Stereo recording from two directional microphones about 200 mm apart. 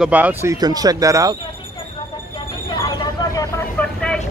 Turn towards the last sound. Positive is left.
turn(degrees=5)  # may be behind; listen again after turning